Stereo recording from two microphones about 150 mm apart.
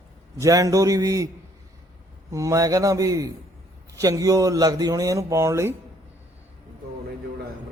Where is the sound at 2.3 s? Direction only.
20° right (ahead or behind).